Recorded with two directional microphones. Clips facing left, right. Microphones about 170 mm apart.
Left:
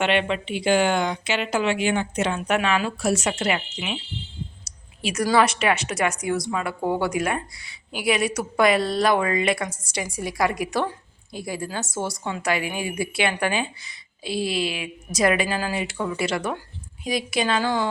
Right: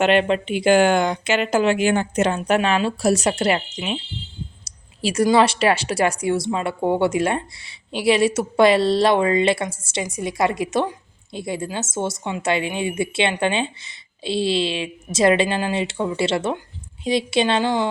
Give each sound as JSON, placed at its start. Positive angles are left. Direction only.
{"t": 0.0, "sound": "a woman's voice", "side_deg": -40}